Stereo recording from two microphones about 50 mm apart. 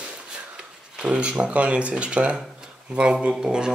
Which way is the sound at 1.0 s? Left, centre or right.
Right.